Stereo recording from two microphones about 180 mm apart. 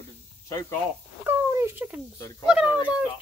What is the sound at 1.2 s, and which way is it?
A child's voice, 15° right (ahead or behind).